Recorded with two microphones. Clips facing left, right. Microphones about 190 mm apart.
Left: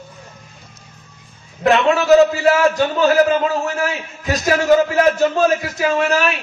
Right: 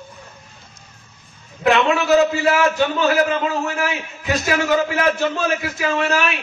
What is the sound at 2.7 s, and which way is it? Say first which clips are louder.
Speech: left 2 dB; 40° left (ahead or behind).